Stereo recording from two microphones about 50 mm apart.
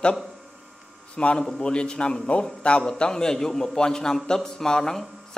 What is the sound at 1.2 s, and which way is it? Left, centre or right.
A man's voice, left.